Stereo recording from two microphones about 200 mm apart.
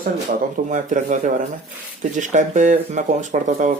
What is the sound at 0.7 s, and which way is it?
Speech, 40° right (ahead or behind).